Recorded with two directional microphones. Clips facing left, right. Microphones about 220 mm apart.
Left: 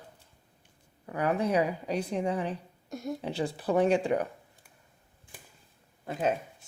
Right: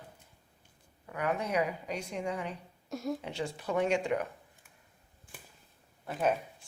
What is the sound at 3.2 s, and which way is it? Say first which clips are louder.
A woman's voice: left 5 dB; 35° left (ahead or behind).